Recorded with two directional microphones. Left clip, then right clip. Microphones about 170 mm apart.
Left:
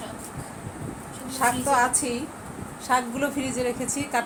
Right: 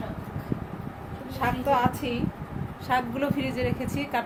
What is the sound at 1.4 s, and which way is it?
Speech, 10° left (ahead or behind).